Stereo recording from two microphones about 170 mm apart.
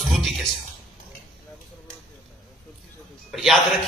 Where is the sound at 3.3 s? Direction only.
Centre (ahead or behind).